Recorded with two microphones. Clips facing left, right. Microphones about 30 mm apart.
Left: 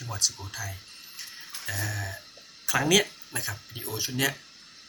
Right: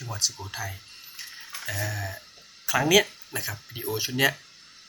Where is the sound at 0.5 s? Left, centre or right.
Right.